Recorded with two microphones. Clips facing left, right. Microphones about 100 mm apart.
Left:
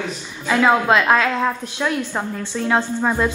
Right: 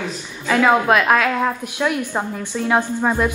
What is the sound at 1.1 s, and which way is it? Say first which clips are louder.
A woman's voice: even; 10° right (ahead or behind).